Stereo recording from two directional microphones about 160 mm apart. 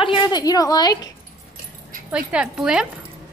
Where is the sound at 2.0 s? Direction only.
5° right (ahead or behind).